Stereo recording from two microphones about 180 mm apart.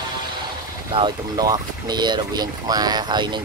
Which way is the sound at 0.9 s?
25° right (ahead or behind).